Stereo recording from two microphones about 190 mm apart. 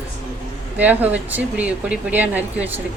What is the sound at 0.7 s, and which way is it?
Speech, 10° right (ahead or behind).